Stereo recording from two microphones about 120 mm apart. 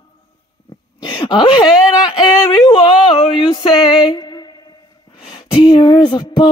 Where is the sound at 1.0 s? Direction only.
40° left (ahead or behind).